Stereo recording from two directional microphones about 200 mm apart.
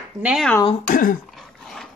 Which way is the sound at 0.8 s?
45° left (ahead or behind).